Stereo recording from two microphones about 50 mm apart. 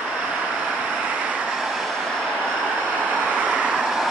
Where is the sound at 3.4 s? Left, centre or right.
Right.